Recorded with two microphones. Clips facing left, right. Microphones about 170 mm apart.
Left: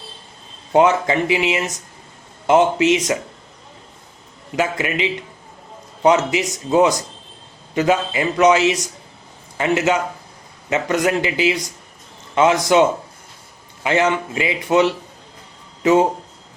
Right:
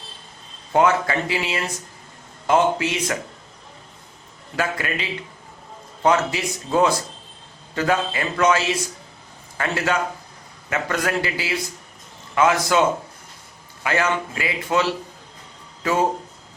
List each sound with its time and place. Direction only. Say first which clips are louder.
0.7 s a man's voice: left 4 dB; 20° left (ahead or behind)
4.5 s a man's voice: left 4 dB; 20° left (ahead or behind)
13.8 s a man's voice: left 4 dB; 20° left (ahead or behind)